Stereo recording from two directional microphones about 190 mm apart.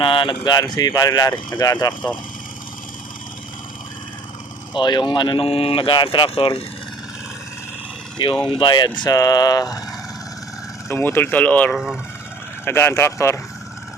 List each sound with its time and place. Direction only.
0.0 s speech: 25° left (ahead or behind)
4.7 s speech: 25° left (ahead or behind)
8.4 s speech: 25° left (ahead or behind)
10.8 s speech: 10° left (ahead or behind)